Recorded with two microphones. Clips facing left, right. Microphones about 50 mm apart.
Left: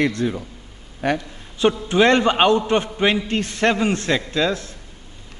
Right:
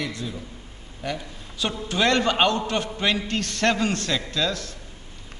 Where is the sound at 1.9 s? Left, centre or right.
Left.